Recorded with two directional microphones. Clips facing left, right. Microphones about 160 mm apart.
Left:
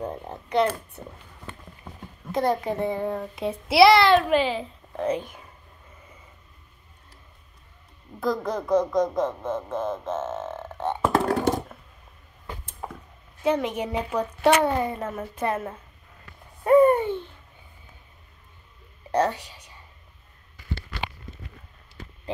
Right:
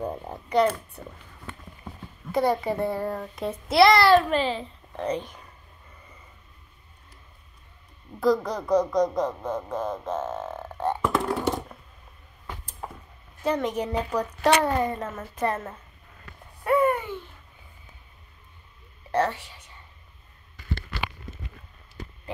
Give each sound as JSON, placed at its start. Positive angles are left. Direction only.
{"t": 0.0, "sound": "a child's voice", "side_deg": 0}
{"t": 2.3, "sound": "a child's voice", "side_deg": 0}
{"t": 8.2, "sound": "a child's voice", "side_deg": 0}
{"t": 13.4, "sound": "a child's voice", "side_deg": 5}
{"t": 16.6, "sound": "a sound", "side_deg": 35}
{"t": 19.1, "sound": "speech", "side_deg": 15}